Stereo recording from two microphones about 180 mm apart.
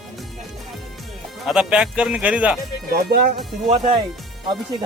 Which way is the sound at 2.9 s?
55° right (ahead or behind).